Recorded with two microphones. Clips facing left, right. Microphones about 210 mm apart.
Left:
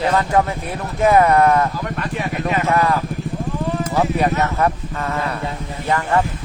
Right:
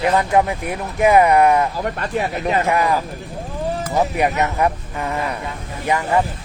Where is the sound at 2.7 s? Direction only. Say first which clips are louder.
Left 2 dB; 15° right (ahead or behind).